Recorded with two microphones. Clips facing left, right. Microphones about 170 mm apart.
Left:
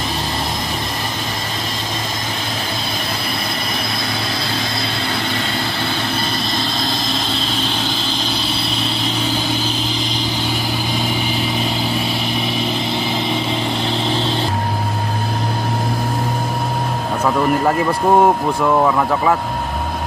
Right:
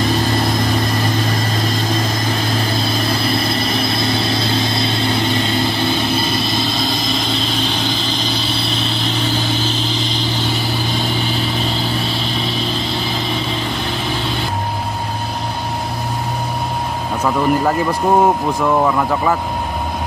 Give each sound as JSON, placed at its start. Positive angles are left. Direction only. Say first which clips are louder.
{"t": 12.0, "sound": "vehicle", "louder": "even", "side_deg": 15}
{"t": 17.2, "sound": "speech", "louder": "right 1 dB", "side_deg": 0}